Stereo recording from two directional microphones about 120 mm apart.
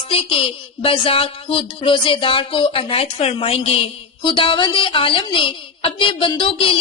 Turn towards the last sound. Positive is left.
turn(degrees=50)  # may be behind; listen again after turning